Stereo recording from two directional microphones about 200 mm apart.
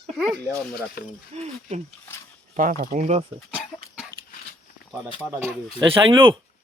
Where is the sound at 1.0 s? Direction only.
50° left (ahead or behind).